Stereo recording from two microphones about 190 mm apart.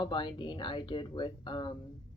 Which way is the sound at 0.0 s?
25° left (ahead or behind).